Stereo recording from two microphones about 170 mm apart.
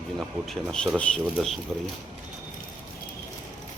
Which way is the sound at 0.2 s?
Centre (ahead or behind).